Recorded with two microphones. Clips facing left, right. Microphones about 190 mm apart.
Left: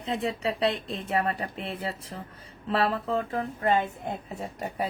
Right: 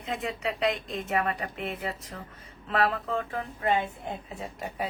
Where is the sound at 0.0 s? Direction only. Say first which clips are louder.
Left 3 dB; 35° left (ahead or behind).